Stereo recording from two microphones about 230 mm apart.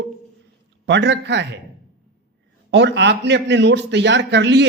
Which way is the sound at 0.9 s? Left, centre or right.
Right.